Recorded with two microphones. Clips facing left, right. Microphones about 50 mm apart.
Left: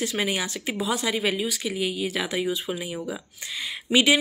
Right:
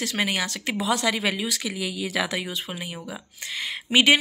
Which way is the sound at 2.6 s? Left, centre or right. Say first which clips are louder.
Left 4 dB; right.